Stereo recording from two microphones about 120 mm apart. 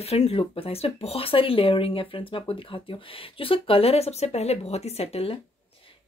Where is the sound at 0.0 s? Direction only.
60° left (ahead or behind).